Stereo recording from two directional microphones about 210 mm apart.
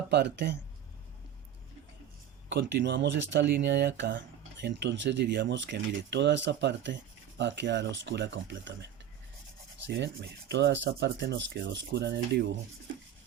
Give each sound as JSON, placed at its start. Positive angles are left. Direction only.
{"t": 0.1, "sound": "speech", "side_deg": -55}
{"t": 2.5, "sound": "speech", "side_deg": -55}
{"t": 9.8, "sound": "rub", "side_deg": -55}
{"t": 10.5, "sound": "speech", "side_deg": -55}